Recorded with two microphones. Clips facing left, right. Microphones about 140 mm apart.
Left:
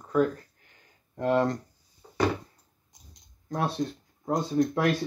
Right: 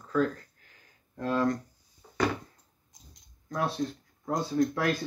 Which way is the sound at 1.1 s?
25° left (ahead or behind).